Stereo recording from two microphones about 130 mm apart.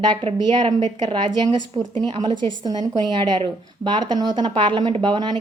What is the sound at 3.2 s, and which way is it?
Speech, 35° right (ahead or behind).